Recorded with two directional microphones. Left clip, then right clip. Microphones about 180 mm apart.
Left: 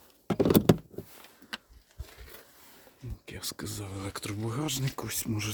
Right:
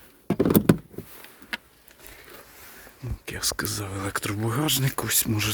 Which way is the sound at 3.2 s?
10° left (ahead or behind).